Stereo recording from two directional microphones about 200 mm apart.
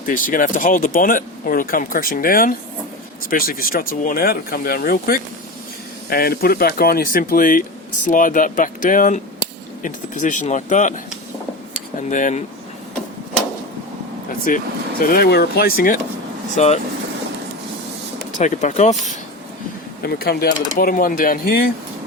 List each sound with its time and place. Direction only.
0.0 s speech: 45° left (ahead or behind)
14.5 s speech: 45° left (ahead or behind)
16.6 s speech: 35° left (ahead or behind)
18.3 s speech: 40° left (ahead or behind)
20.0 s speech: 50° left (ahead or behind)